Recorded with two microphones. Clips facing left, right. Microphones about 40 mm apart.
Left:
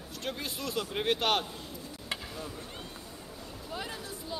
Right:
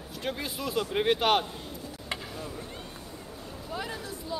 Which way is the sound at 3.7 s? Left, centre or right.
Centre.